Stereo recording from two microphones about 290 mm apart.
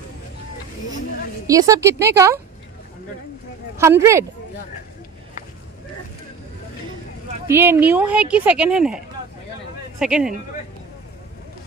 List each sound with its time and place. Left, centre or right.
1.5 s a woman's voice: centre
3.7 s a woman's voice: centre
7.4 s speech: centre